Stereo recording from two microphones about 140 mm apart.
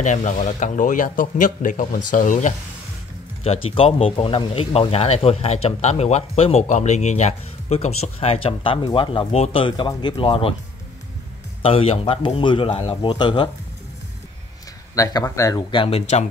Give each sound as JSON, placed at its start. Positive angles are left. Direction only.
{"t": 0.0, "sound": "speech", "side_deg": 60}
{"t": 3.4, "sound": "speech", "side_deg": 40}
{"t": 11.6, "sound": "speech", "side_deg": 45}
{"t": 15.0, "sound": "speech", "side_deg": 25}
{"t": 15.7, "sound": "speech", "side_deg": 35}